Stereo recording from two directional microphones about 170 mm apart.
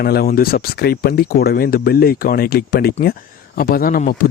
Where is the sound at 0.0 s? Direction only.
65° left (ahead or behind).